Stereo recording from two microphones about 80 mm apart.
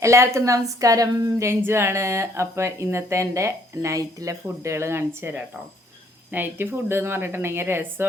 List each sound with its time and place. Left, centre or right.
0.0 s speech: right
1.5 s a woman's voice: right